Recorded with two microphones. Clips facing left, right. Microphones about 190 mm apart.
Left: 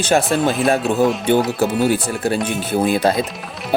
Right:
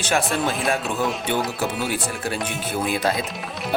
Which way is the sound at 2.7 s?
35° left (ahead or behind).